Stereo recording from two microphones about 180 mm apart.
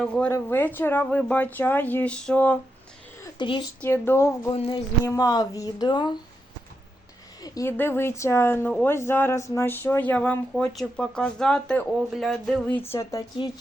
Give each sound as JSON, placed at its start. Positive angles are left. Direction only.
{"t": 0.0, "sound": "speech", "side_deg": 5}
{"t": 3.3, "sound": "speech", "side_deg": 25}
{"t": 3.8, "sound": "speech", "side_deg": 15}
{"t": 4.5, "sound": "speech", "side_deg": 35}
{"t": 5.0, "sound": "a woman's voice", "side_deg": 20}
{"t": 7.4, "sound": "speech", "side_deg": 20}
{"t": 11.9, "sound": "a sound", "side_deg": 0}
{"t": 12.9, "sound": "a woman's voice", "side_deg": 15}